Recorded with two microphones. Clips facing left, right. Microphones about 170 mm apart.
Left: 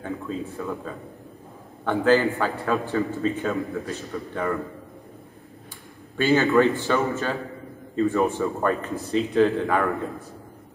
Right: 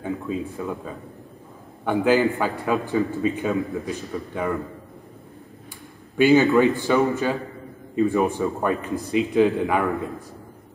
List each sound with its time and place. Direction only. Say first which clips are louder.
0.0 s a man's voice: right 3 dB; 15° right (ahead or behind)
6.1 s a man's voice: right 3 dB; 15° right (ahead or behind)